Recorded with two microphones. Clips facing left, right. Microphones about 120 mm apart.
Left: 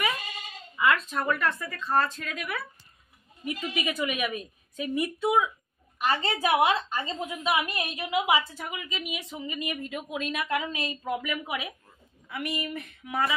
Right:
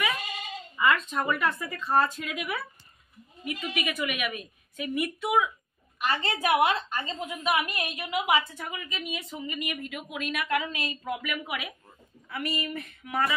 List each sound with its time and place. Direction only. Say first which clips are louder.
0.7 s speech: even; centre (ahead or behind)
3.4 s a woman's voice: left 1 dB; 30° left (ahead or behind)